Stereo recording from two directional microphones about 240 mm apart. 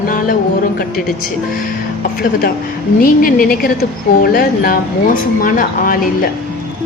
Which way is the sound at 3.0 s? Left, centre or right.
Left.